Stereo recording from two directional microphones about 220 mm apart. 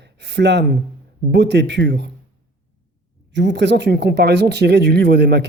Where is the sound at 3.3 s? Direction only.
50° right (ahead or behind).